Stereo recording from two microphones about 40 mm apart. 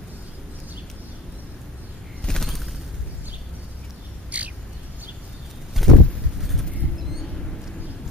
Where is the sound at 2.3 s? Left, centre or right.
Centre.